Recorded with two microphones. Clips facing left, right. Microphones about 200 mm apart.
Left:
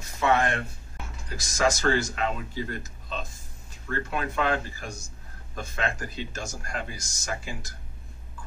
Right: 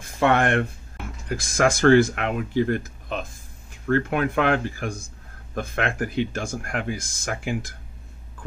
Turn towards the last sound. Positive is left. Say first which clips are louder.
# right 7 dB
turn(degrees=-55)  # may be behind; listen again after turning